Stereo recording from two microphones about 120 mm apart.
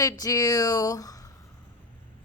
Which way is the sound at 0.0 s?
30° left (ahead or behind).